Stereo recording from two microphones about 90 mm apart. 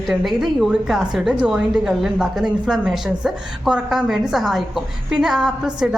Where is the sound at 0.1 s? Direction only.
5° right (ahead or behind).